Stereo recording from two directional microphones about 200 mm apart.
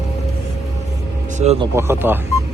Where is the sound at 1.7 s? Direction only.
10° right (ahead or behind).